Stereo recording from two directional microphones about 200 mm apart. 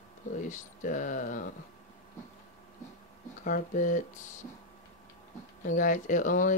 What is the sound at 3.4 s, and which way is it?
Speech, 40° left (ahead or behind).